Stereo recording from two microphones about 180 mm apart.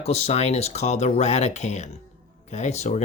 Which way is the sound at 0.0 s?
35° left (ahead or behind).